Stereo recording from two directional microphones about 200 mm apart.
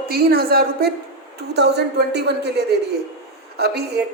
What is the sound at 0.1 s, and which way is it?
A woman's voice, 50° right (ahead or behind).